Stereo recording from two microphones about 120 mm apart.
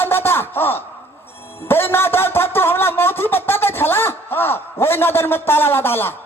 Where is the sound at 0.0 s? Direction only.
20° left (ahead or behind).